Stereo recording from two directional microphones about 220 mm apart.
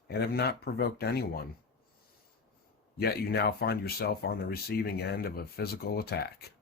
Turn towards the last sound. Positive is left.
turn(degrees=45)  # may be behind; listen again after turning